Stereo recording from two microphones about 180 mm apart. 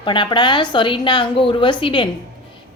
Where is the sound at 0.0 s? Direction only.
25° left (ahead or behind).